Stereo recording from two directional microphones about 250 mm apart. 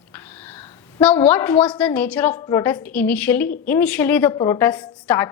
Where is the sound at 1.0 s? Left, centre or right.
Centre.